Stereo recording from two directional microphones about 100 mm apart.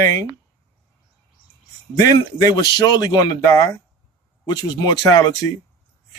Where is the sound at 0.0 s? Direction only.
35° left (ahead or behind).